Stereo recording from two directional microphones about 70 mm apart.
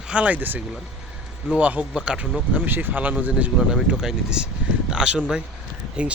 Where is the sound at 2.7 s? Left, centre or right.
Right.